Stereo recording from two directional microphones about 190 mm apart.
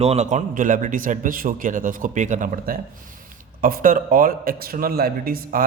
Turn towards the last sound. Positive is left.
turn(degrees=-50)  # may be behind; listen again after turning